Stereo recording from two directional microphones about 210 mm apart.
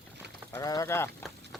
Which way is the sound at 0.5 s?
15° left (ahead or behind).